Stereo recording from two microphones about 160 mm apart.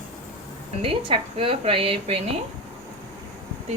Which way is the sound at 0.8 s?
35° right (ahead or behind).